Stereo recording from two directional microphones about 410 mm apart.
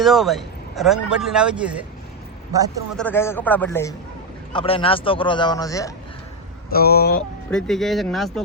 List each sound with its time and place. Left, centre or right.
0.0 s speech: centre
3.0 s a man's voice: centre
6.7 s speech: left
7.5 s speech: centre